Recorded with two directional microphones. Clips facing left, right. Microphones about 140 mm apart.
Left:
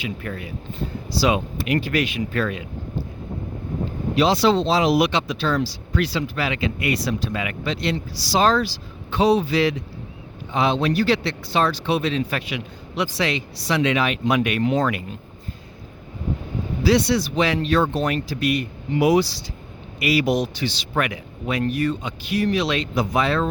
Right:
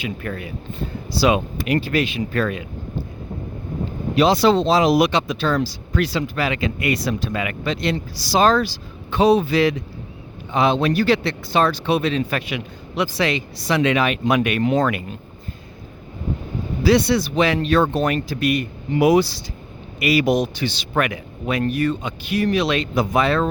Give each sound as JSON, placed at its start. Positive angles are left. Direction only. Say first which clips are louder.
{"t": 0.0, "sound": "speech", "louder": "right 2 dB", "side_deg": -55}
{"t": 1.6, "sound": "speech", "louder": "right 1 dB", "side_deg": -35}
{"t": 2.3, "sound": "speech", "louder": "right 2 dB", "side_deg": -45}
{"t": 4.1, "sound": "speech", "louder": "right 2 dB", "side_deg": -50}
{"t": 16.8, "sound": "speech", "louder": "right 2 dB", "side_deg": -55}